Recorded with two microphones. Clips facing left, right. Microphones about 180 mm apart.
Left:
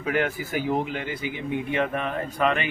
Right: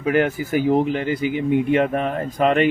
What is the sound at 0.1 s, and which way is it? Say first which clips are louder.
A man's voice: right 6 dB; 45° right (ahead or behind).